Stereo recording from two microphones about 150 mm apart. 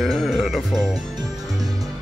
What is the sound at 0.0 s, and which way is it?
Music, centre (ahead or behind).